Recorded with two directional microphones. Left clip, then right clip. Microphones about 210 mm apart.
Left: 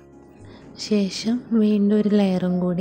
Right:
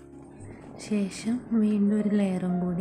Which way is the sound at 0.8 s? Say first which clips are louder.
Left 8 dB; 20° left (ahead or behind).